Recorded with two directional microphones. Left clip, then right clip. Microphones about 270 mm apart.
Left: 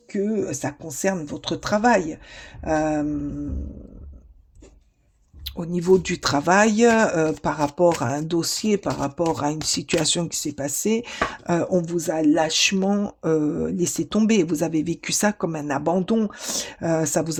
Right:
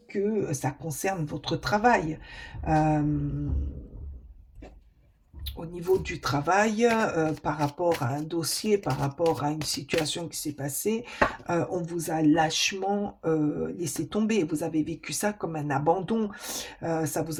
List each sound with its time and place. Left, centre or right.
0.1 s speech: left
5.5 s speech: left